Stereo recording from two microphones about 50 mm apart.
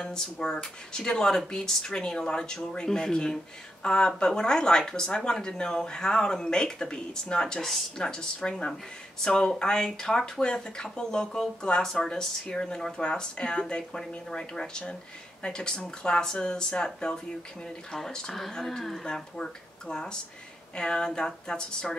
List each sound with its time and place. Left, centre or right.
0.0 s speech: centre